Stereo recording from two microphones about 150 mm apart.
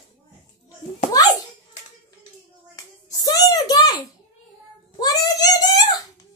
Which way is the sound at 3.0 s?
25° left (ahead or behind).